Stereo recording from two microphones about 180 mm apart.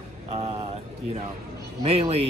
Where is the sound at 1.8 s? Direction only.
35° right (ahead or behind).